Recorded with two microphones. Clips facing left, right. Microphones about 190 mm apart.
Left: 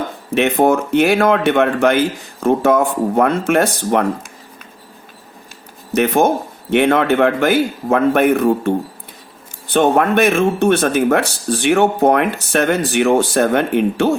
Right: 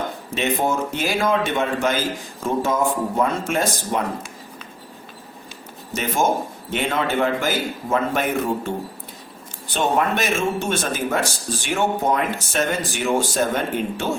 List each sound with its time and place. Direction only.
0.3 s speech: 65° left (ahead or behind)
5.9 s speech: 60° left (ahead or behind)